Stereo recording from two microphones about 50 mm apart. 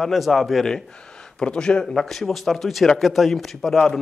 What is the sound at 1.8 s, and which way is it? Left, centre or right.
A man's voice, centre.